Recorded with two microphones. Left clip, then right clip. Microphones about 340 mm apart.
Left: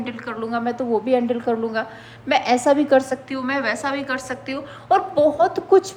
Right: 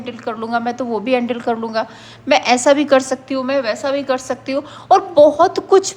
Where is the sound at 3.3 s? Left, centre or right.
Centre.